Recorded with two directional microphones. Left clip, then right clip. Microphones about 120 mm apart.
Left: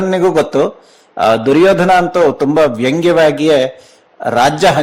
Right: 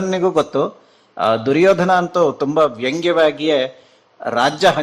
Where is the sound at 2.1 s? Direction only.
35° left (ahead or behind).